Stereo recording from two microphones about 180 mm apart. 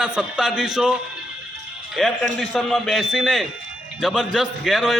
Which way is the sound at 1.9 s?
Centre (ahead or behind).